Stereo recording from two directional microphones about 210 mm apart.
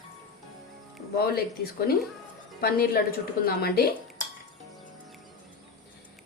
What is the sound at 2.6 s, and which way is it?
A woman's voice, 45° left (ahead or behind).